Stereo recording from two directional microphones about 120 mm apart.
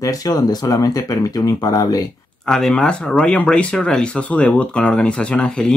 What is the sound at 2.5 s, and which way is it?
Speech, 5° left (ahead or behind).